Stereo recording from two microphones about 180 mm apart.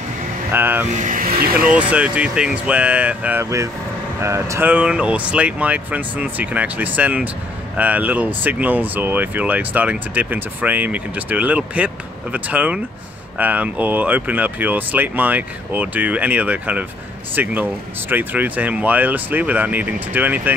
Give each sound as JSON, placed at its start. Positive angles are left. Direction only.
{"t": 0.5, "sound": "speech", "side_deg": -10}
{"t": 0.9, "sound": "speech", "side_deg": -45}
{"t": 1.7, "sound": "speech", "side_deg": -5}